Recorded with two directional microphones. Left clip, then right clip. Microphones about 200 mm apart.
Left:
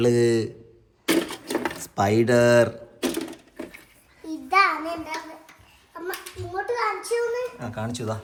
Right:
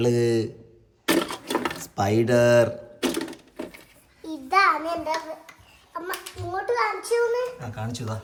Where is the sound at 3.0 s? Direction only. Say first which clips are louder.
Even; centre (ahead or behind).